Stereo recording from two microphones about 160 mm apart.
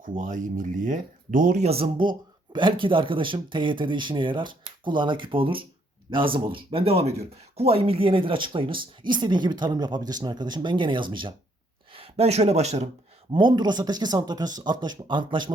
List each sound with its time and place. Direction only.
0.0 s speech: 55° right (ahead or behind)
13.3 s speech: 30° right (ahead or behind)